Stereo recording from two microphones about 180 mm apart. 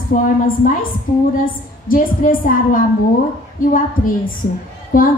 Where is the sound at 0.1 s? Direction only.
45° left (ahead or behind).